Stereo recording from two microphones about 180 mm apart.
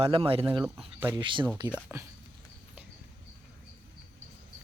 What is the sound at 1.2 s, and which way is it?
Speech, 25° right (ahead or behind).